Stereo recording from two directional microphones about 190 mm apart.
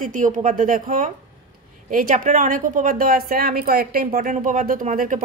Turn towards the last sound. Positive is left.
turn(degrees=-45)  # may be behind; listen again after turning